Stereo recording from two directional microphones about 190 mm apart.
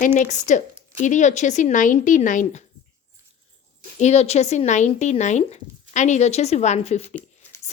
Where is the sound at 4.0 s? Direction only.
35° left (ahead or behind).